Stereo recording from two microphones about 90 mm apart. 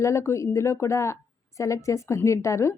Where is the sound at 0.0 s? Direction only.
30° left (ahead or behind).